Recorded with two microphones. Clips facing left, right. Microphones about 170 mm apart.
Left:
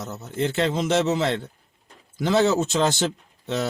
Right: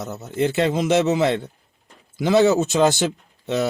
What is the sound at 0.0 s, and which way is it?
Speech, 15° right (ahead or behind).